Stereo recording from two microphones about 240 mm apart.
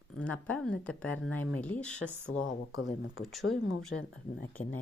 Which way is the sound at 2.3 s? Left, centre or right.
Left.